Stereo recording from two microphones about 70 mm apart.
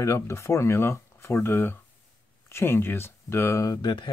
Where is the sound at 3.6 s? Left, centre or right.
Left.